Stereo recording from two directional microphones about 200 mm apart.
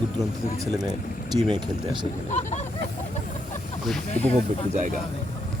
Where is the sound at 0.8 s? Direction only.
20° right (ahead or behind).